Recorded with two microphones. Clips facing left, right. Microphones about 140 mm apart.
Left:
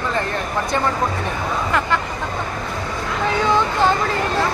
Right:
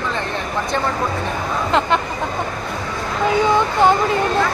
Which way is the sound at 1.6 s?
20° right (ahead or behind).